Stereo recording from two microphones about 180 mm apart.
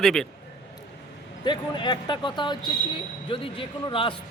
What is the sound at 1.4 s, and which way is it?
Speech, 25° left (ahead or behind).